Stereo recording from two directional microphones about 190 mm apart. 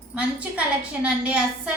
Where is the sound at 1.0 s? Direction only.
5° right (ahead or behind).